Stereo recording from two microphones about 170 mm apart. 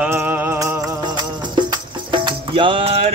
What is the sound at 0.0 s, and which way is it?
Music, 10° right (ahead or behind).